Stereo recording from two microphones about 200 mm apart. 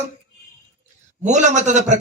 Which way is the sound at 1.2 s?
35° right (ahead or behind).